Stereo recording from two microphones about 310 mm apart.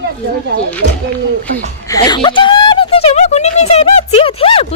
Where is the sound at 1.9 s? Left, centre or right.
Centre.